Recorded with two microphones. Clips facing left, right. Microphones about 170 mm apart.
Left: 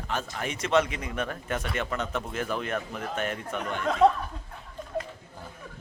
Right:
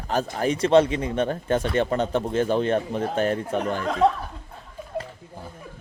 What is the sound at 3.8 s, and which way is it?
Speech, centre (ahead or behind).